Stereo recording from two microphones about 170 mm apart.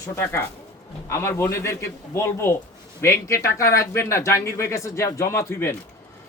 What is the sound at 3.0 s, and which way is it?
Speech, 15° left (ahead or behind).